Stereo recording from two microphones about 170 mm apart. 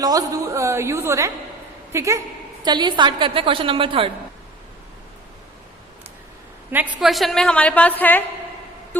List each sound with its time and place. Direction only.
0.0 s a woman's voice: 20° right (ahead or behind)
7.0 s a woman's voice: centre (ahead or behind)